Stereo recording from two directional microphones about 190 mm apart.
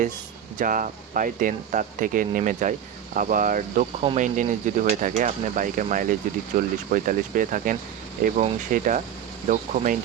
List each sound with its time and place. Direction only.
0.6 s speech: 45° right (ahead or behind)